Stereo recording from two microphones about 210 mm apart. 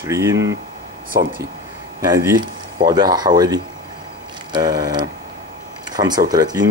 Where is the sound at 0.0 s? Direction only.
15° right (ahead or behind).